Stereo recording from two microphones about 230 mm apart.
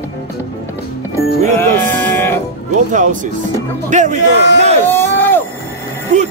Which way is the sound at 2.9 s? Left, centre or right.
Right.